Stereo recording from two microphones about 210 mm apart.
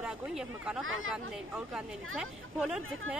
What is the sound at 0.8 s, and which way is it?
Speech, 70° right (ahead or behind).